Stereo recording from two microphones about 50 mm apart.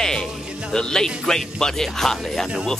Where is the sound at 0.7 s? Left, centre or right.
Centre.